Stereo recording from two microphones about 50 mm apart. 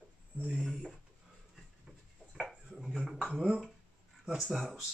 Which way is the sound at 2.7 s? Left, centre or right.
Centre.